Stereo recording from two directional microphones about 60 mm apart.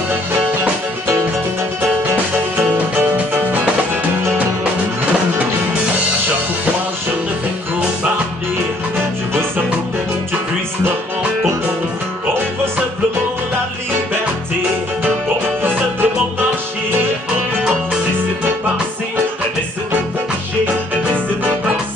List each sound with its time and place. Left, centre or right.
2.3 s music: right
15.6 s music: right